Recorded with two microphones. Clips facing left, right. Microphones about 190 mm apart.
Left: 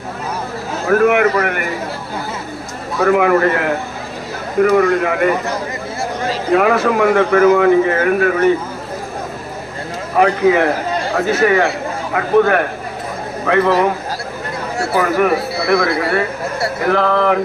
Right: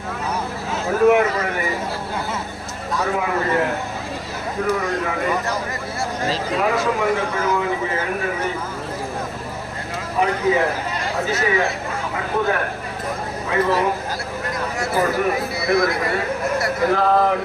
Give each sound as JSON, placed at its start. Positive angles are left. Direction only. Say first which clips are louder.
{"t": 0.9, "sound": "speech", "louder": "left 3 dB", "side_deg": 70}
{"t": 3.0, "sound": "speech", "louder": "left 10 dB", "side_deg": 70}
{"t": 6.5, "sound": "speech", "louder": "left 9 dB", "side_deg": 65}
{"t": 10.2, "sound": "a man's voice", "louder": "left 6 dB", "side_deg": 70}
{"t": 14.9, "sound": "speech", "louder": "left 5 dB", "side_deg": 70}